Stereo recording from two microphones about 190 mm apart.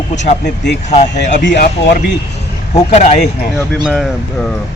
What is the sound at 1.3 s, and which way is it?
Speech, 65° left (ahead or behind).